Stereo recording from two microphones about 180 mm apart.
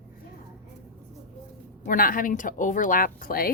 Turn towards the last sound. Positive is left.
turn(degrees=55)  # may be behind; listen again after turning